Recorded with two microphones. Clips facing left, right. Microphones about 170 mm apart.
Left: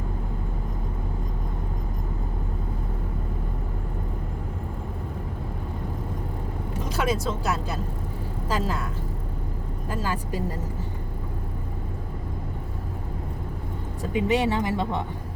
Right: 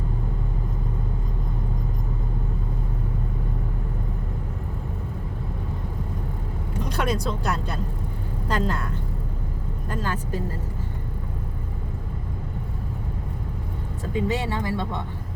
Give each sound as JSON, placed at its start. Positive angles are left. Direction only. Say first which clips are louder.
{"t": 6.8, "sound": "a woman's voice", "louder": "even", "side_deg": 0}
{"t": 9.9, "sound": "speech", "louder": "even", "side_deg": 10}
{"t": 14.1, "sound": "speech", "louder": "left 3 dB", "side_deg": 15}